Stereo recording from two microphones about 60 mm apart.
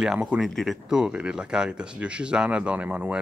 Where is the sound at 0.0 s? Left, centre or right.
Centre.